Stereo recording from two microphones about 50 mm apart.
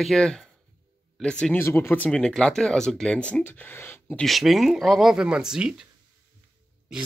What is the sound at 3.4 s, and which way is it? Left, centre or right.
Speech, left.